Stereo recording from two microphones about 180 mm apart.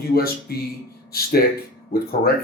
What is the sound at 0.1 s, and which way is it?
Speech, 60° left (ahead or behind).